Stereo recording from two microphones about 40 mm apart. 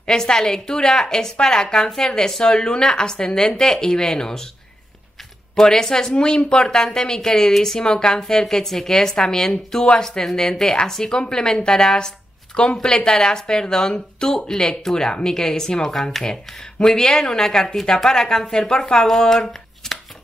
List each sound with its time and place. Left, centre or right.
0.0 s speech: centre
5.6 s speech: centre
19.1 s shuffling cards: centre